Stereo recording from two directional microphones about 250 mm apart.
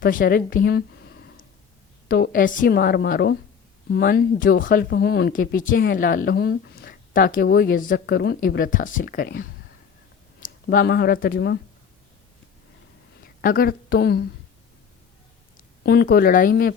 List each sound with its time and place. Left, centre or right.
0.0 s speech: left
13.2 s a woman's voice: left
15.5 s a woman's voice: left